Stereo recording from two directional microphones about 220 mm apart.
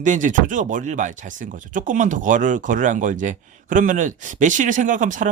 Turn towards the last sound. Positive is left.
turn(degrees=-35)  # may be behind; listen again after turning